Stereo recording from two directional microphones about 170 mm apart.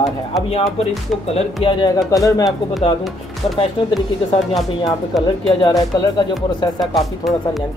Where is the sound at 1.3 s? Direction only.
35° left (ahead or behind).